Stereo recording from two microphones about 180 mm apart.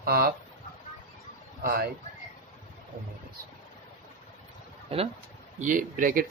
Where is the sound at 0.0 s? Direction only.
60° right (ahead or behind).